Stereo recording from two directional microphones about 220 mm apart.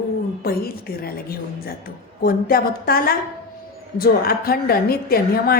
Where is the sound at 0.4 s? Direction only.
45° left (ahead or behind).